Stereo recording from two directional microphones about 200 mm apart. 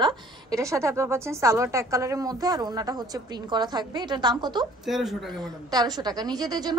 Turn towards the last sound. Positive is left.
turn(degrees=-20)  # may be behind; listen again after turning